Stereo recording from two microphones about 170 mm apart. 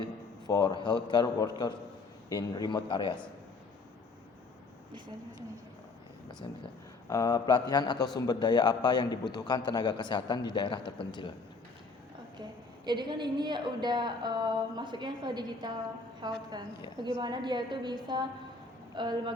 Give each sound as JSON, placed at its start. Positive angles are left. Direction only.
{"t": 0.4, "sound": "a man's voice", "side_deg": 25}
{"t": 7.1, "sound": "a man's voice", "side_deg": 20}
{"t": 12.8, "sound": "speech", "side_deg": -25}